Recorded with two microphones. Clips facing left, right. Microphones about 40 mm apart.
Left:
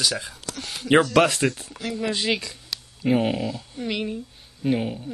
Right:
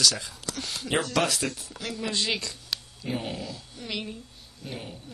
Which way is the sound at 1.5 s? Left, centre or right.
Left.